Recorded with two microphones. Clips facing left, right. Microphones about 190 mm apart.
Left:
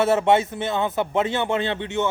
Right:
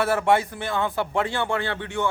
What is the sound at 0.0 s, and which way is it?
Speech, 25° left (ahead or behind).